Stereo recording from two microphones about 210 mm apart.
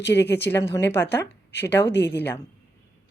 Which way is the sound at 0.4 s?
10° left (ahead or behind).